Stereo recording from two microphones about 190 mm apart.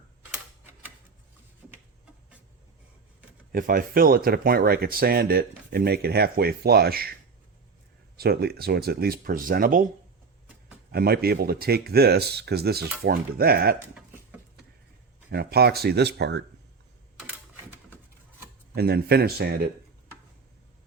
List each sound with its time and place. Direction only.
3.5 s speech: 45° right (ahead or behind)
8.2 s speech: 55° right (ahead or behind)
10.9 s speech: 55° right (ahead or behind)
15.3 s speech: 55° right (ahead or behind)
18.7 s speech: 55° right (ahead or behind)